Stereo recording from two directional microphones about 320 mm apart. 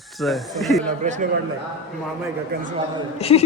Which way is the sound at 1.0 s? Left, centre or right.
Right.